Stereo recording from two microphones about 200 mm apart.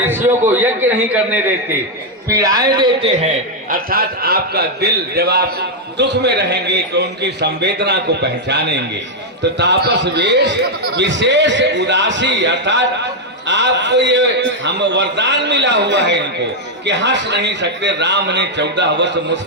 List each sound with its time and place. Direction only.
0.0 s a man's voice: 10° right (ahead or behind)
2.3 s a man's voice: 20° right (ahead or behind); by 19.4 s 60° right (ahead or behind)